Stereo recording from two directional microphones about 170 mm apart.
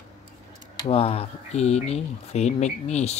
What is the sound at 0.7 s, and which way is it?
Speech, 35° left (ahead or behind).